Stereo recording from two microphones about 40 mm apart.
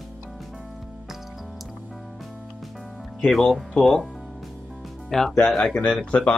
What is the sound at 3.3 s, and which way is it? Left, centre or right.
Speech, centre.